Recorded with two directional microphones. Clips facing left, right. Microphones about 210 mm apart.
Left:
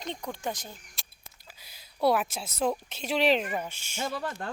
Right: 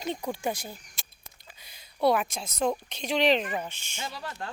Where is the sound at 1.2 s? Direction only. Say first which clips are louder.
Even; 5° left (ahead or behind).